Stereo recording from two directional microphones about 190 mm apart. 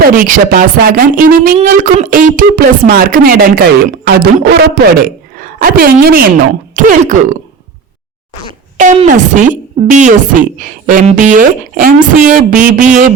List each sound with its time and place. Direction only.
0.0 s speech: 45° right (ahead or behind)
9.0 s speech: 40° right (ahead or behind)